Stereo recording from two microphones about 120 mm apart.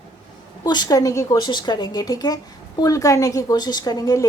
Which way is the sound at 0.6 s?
35° left (ahead or behind).